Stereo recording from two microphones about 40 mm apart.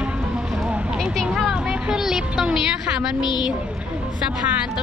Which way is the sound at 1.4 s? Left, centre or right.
Centre.